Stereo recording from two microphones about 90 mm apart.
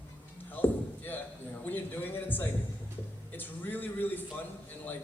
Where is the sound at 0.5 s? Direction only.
20° left (ahead or behind).